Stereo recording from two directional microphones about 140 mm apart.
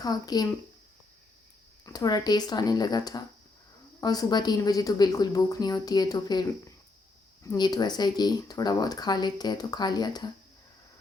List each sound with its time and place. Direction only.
0.0 s speech: 30° left (ahead or behind)
1.8 s speech: 30° left (ahead or behind)
7.4 s speech: 30° left (ahead or behind)